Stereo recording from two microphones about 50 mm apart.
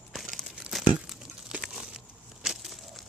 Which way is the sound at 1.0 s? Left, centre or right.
Centre.